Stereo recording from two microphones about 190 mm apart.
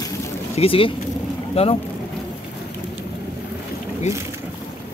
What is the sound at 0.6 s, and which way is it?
Speech, 30° left (ahead or behind).